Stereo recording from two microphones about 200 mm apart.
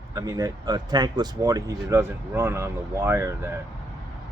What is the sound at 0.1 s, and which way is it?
Speech, 20° right (ahead or behind).